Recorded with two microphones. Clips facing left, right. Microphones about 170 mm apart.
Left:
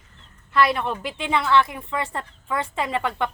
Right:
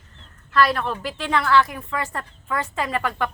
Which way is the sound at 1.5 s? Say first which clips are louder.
Right 1 dB; 25° left (ahead or behind).